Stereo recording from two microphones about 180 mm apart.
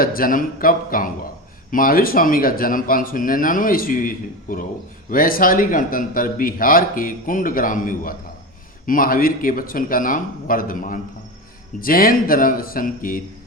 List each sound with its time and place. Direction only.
0.0 s a man's voice: 55° left (ahead or behind)